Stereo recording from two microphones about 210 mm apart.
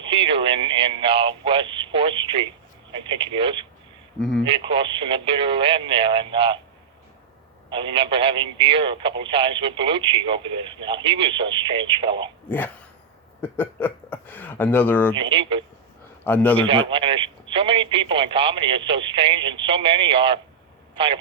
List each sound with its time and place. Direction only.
0.0 s speech: 25° right (ahead or behind)
7.7 s speech: 25° right (ahead or behind)
12.5 s a man's voice: 10° left (ahead or behind)
15.1 s speech: 25° right (ahead or behind)
16.2 s a man's voice: 10° left (ahead or behind)
16.6 s speech: 25° right (ahead or behind)